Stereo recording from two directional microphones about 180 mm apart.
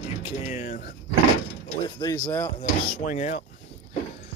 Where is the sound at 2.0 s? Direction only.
15° left (ahead or behind).